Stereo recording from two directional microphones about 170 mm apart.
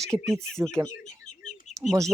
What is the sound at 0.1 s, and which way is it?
Speech, 20° right (ahead or behind).